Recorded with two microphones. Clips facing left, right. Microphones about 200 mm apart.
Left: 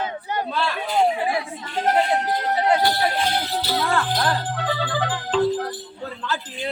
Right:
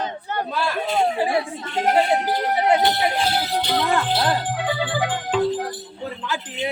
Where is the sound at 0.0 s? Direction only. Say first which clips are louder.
Even; 15° left (ahead or behind).